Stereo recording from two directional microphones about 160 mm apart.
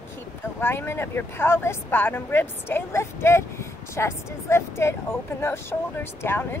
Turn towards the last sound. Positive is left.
turn(degrees=15)  # may be behind; listen again after turning